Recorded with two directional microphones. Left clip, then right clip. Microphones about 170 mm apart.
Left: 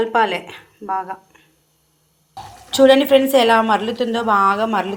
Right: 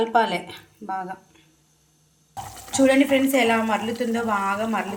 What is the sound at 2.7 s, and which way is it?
A woman's voice, 30° left (ahead or behind).